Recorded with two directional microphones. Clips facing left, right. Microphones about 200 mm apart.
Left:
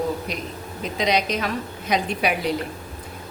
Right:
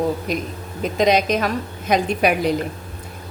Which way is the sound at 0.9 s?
50° right (ahead or behind).